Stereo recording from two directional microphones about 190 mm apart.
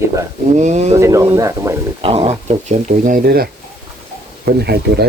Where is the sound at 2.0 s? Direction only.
30° right (ahead or behind); by 5.0 s 60° right (ahead or behind).